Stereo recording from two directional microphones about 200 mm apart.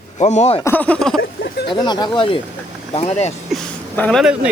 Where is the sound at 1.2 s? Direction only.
55° left (ahead or behind).